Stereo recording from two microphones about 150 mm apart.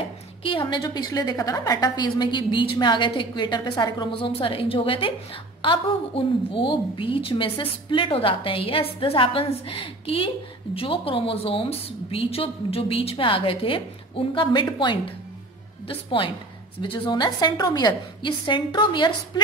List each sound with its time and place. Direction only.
0.4 s a woman's voice: 35° left (ahead or behind)